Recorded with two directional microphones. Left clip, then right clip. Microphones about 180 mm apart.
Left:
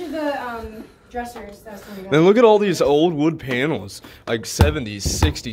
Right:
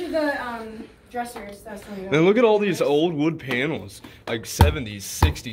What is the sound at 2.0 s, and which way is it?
Speech, 25° left (ahead or behind).